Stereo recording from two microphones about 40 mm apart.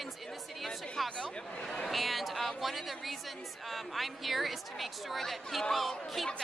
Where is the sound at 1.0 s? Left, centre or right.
Left.